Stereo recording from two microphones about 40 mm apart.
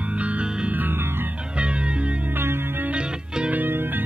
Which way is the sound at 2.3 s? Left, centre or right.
Right.